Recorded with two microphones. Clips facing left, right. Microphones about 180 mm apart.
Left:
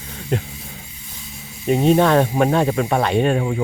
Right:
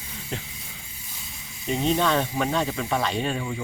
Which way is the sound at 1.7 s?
55° left (ahead or behind).